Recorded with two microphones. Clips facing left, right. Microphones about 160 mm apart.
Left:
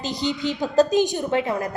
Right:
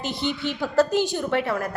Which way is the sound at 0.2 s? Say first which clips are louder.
Left 3 dB; 15° left (ahead or behind).